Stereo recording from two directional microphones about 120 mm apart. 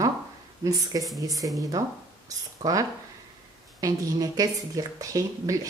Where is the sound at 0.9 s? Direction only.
30° right (ahead or behind).